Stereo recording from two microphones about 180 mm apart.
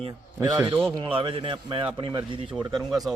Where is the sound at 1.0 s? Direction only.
30° right (ahead or behind).